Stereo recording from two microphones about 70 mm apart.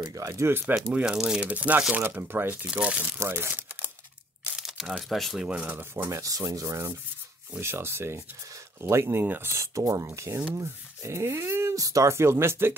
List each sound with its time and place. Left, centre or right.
0.0 s speech: right
0.5 s speech: right
1.0 s speech: centre
2.0 s speech: right
3.2 s speech: right
4.6 s speech: centre
5.4 s speech: centre
5.7 s speech: right
6.0 s speech: right
7.5 s speech: right
9.2 s speech: right
9.5 s speech: right
11.7 s speech: right
12.1 s speech: right